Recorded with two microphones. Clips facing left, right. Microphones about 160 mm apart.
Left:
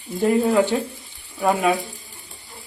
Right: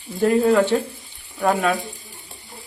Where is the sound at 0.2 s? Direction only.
10° left (ahead or behind).